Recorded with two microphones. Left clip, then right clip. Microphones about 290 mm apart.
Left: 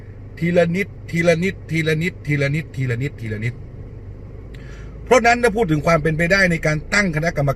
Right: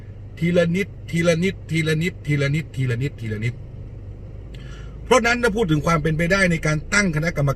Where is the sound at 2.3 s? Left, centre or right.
Centre.